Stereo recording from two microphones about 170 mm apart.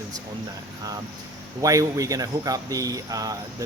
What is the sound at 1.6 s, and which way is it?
Speech, 20° right (ahead or behind).